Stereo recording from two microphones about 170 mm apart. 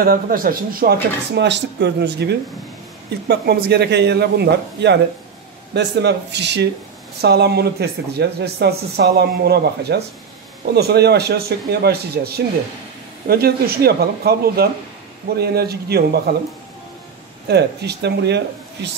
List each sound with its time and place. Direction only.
0.0 s speech: 60° right (ahead or behind)
1.3 s speech: 90° right
7.2 s speech: 70° right (ahead or behind)
17.5 s speech: 75° right (ahead or behind)